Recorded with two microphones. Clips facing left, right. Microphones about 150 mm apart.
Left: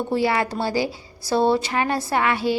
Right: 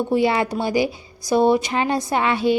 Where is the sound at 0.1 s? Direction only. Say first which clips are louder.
Right 2 dB; 20° right (ahead or behind).